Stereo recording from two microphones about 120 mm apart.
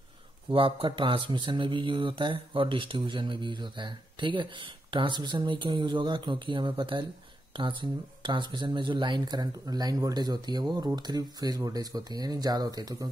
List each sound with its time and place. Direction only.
0.5 s speech: 45° right (ahead or behind)